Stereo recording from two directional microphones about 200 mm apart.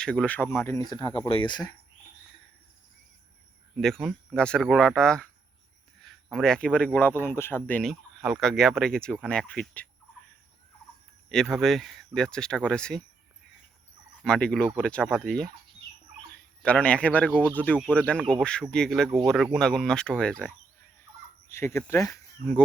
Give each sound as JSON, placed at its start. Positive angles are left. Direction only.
{"t": 0.0, "sound": "speech", "side_deg": 5}
{"t": 3.8, "sound": "speech", "side_deg": 0}
{"t": 11.3, "sound": "speech", "side_deg": 0}
{"t": 14.3, "sound": "speech", "side_deg": 5}
{"t": 16.6, "sound": "speech", "side_deg": 5}
{"t": 21.5, "sound": "speech", "side_deg": 10}